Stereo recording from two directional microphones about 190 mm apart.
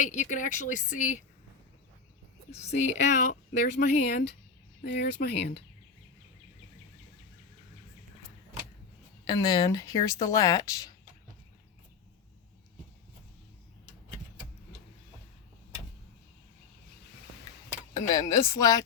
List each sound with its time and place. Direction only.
0.0 s speech: 40° left (ahead or behind)
2.6 s speech: 35° left (ahead or behind); by 5.6 s 60° left (ahead or behind)
9.2 s speech: 20° left (ahead or behind)
17.9 s speech: 15° left (ahead or behind)